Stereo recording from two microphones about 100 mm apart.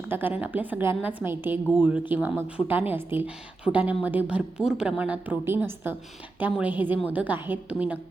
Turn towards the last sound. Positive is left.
turn(degrees=-15)  # may be behind; listen again after turning